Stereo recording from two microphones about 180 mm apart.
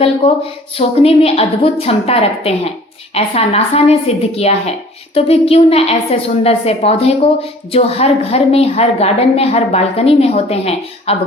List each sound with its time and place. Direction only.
0.8 s a woman's voice: 35° left (ahead or behind)